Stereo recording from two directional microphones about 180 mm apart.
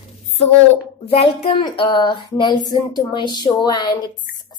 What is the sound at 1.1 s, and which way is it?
A woman's voice, 35° left (ahead or behind).